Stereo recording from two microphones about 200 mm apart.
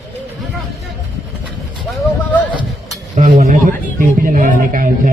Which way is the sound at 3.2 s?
35° right (ahead or behind).